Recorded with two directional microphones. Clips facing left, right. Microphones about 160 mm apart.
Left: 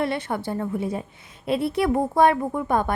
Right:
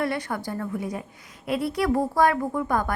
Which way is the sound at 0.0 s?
25° left (ahead or behind).